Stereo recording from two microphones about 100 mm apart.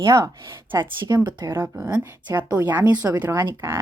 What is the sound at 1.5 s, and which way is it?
A woman's voice, 20° right (ahead or behind).